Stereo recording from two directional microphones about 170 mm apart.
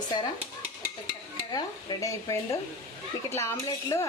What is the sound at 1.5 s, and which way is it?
Speech, 20° left (ahead or behind).